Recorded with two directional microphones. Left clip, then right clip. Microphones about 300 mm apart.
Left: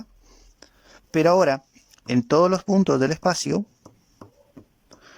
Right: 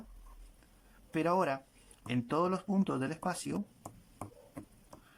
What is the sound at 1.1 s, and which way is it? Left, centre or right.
A man's voice, left.